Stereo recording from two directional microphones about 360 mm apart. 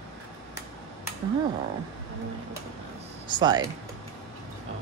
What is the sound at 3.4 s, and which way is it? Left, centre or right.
Speech, centre.